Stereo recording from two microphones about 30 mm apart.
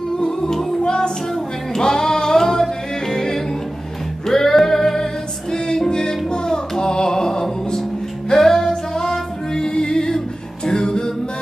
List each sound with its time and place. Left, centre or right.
0.2 s music: centre
0.8 s music: left
1.8 s singing: left
3.1 s music: left
6.8 s a sound: left
8.3 s music: centre